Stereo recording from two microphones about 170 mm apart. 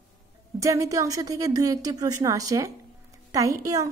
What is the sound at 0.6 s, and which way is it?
A woman's voice, 20° right (ahead or behind).